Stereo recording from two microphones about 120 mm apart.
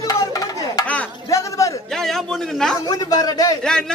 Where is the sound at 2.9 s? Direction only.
30° left (ahead or behind).